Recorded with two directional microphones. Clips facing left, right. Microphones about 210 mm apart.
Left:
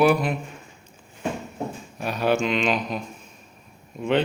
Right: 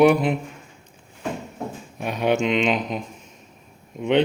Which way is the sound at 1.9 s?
20° right (ahead or behind).